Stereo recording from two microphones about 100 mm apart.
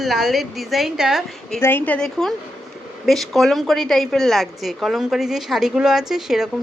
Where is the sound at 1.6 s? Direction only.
20° left (ahead or behind).